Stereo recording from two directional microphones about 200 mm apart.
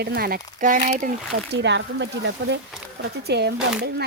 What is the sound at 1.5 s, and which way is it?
A woman's voice, 60° right (ahead or behind).